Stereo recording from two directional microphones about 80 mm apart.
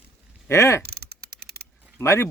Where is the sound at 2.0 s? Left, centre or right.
Left.